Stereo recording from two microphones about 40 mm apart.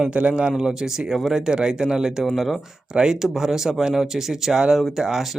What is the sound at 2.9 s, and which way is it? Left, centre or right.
A man's voice, centre.